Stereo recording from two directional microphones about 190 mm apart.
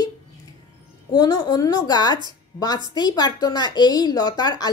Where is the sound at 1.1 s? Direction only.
20° left (ahead or behind).